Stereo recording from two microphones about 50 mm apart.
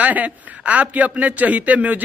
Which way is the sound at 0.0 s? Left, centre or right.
Right.